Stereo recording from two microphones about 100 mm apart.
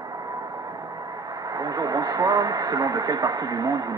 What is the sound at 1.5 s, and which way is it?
Speech, 40° right (ahead or behind).